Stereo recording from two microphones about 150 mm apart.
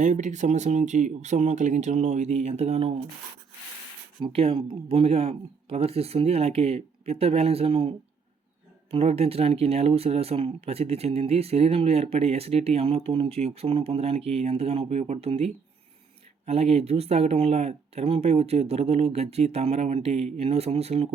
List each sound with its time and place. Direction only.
0.0 s speech: 55° right (ahead or behind)
4.2 s speech: 40° right (ahead or behind)